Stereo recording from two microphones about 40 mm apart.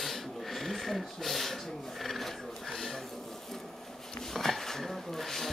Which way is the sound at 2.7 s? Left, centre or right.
Centre.